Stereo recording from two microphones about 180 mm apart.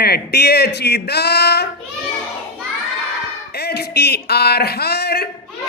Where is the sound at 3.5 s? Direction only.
60° left (ahead or behind).